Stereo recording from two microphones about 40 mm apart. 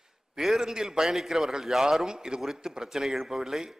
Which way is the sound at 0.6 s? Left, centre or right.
Centre.